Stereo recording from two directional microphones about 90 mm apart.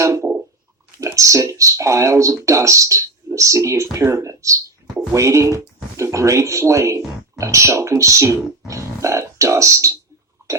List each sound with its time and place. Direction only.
0.0 s a sound: 35° right (ahead or behind)
0.9 s speech: 35° right (ahead or behind)
10.4 s burping: 35° right (ahead or behind)